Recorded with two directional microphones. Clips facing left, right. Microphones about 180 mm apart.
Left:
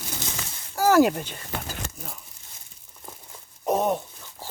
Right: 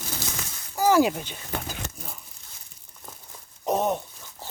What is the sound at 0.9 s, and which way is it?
Speech, 10° right (ahead or behind).